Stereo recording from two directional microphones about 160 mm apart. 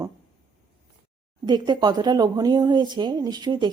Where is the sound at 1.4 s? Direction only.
25° right (ahead or behind).